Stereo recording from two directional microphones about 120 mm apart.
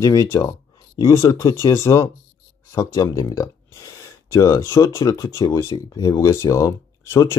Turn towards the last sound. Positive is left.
turn(degrees=25)  # may be behind; listen again after turning